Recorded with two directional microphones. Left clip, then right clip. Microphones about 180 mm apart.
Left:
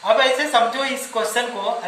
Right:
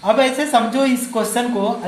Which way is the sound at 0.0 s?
45° right (ahead or behind).